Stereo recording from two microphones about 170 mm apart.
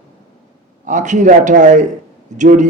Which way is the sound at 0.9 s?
45° right (ahead or behind).